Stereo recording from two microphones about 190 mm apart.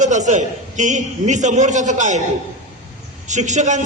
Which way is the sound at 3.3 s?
40° right (ahead or behind).